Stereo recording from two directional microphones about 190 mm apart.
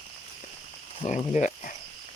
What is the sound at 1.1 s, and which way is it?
Speech, 40° left (ahead or behind).